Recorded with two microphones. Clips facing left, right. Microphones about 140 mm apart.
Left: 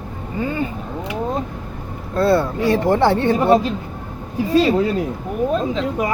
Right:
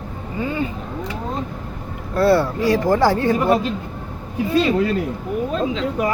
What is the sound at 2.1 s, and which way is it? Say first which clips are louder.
Speech: right 1 dB; 25° left (ahead or behind).